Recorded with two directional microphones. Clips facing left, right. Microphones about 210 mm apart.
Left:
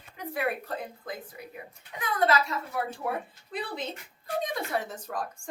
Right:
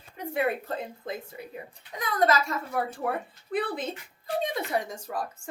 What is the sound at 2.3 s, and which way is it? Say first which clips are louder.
Speech: right 1 dB; 45° right (ahead or behind).